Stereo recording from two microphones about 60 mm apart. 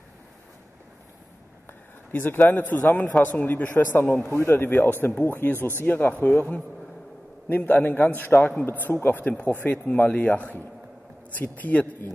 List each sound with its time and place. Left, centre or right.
1.7 s speech: left